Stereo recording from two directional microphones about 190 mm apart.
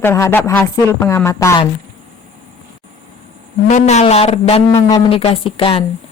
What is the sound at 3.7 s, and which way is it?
A woman's voice, 35° left (ahead or behind).